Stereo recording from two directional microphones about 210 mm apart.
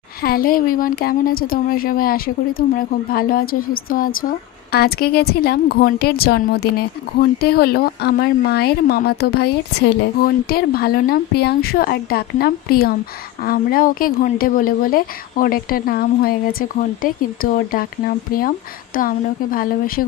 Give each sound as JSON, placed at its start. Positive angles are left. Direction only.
{"t": 0.2, "sound": "speech", "side_deg": 45}